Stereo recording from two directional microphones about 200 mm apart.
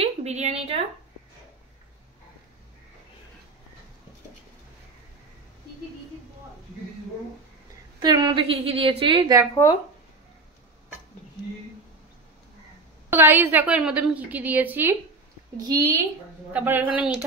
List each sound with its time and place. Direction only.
0.0 s a woman's voice: 35° right (ahead or behind)
8.0 s a woman's voice: 20° right (ahead or behind)
13.1 s a woman's voice: 10° right (ahead or behind)